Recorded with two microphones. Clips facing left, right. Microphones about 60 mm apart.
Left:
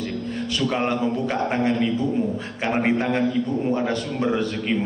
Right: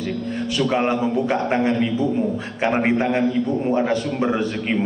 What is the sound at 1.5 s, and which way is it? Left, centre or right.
A man's voice, right.